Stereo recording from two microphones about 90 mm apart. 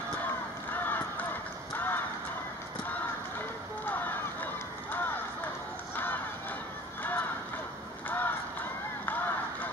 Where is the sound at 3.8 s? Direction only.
20° left (ahead or behind).